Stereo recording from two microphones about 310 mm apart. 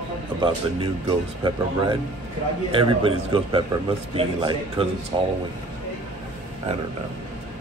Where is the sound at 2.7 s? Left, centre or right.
Centre.